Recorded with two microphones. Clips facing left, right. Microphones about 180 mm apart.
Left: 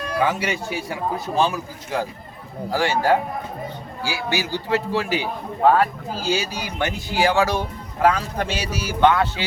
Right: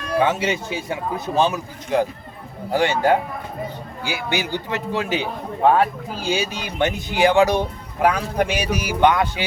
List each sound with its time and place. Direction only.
0.2 s a man's voice: 25° right (ahead or behind)
6.2 s speech: 20° right (ahead or behind)